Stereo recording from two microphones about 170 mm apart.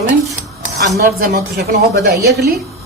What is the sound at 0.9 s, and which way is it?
A woman's voice, 75° right (ahead or behind).